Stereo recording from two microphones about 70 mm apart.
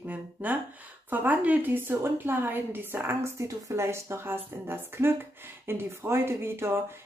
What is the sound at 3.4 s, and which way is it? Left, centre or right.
Speech, right.